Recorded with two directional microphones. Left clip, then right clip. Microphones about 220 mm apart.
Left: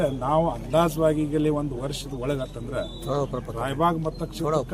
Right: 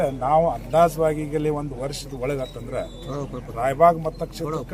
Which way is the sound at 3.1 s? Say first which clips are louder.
Left 7 dB; 50° left (ahead or behind).